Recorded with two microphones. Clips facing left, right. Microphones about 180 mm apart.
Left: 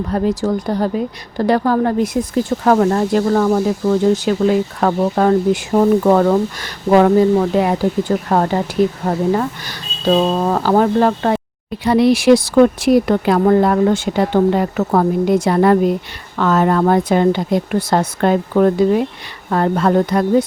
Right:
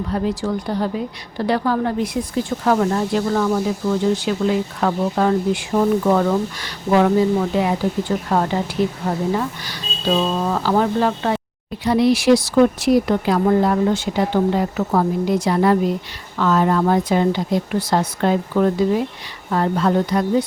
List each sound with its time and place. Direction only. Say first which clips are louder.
0.1 s speech: left 5 dB; 45° left (ahead or behind)
11.8 s speech: left 3 dB; 65° left (ahead or behind)